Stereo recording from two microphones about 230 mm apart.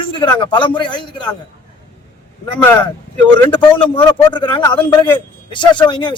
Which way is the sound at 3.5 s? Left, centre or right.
Left.